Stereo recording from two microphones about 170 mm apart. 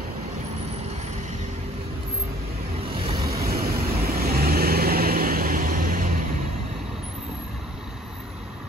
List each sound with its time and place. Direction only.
3.0 s vehicle: 35° right (ahead or behind)
3.4 s vehicle: 65° right (ahead or behind)